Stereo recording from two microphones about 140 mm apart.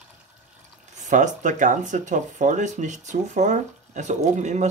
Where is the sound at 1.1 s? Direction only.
60° right (ahead or behind).